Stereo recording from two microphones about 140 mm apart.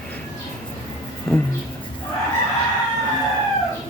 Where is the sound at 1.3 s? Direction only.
15° left (ahead or behind).